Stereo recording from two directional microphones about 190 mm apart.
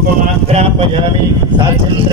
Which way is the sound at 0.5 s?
30° right (ahead or behind).